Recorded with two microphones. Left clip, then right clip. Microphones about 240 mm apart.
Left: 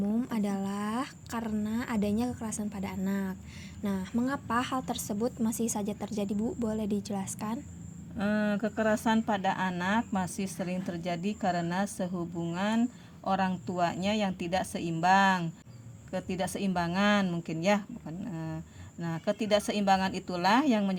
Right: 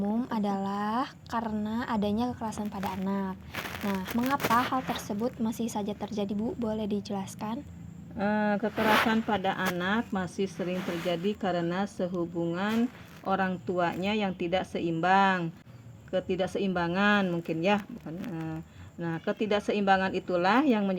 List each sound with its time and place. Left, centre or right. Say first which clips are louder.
0.0 s a woman's voice: right 2 dB; left
8.2 s speech: right 3 dB; left